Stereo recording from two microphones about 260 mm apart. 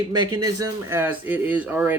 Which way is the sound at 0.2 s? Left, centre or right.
Right.